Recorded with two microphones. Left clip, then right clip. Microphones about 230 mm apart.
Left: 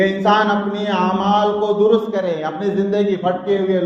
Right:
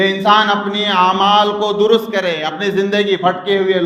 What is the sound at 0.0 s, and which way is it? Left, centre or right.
Mantra, right.